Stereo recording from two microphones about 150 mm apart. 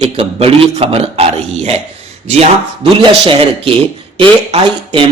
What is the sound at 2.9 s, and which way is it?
Speech, 35° right (ahead or behind).